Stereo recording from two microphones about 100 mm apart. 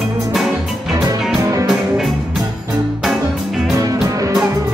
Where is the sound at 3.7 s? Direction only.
35° right (ahead or behind).